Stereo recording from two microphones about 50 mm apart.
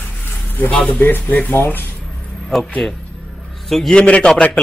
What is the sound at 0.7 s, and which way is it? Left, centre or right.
Speech, left.